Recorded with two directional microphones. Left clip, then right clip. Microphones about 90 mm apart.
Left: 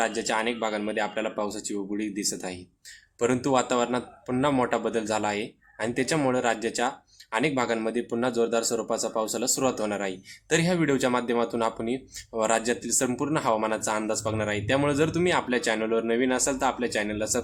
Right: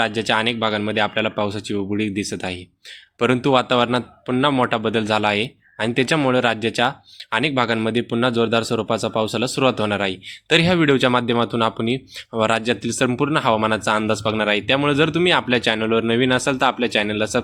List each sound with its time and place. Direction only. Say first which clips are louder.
0.0 s a man's voice: right 7 dB; 25° right (ahead or behind)